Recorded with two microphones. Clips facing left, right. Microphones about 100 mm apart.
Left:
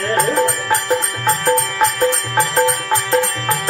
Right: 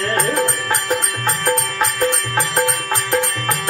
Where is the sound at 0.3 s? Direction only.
15° left (ahead or behind).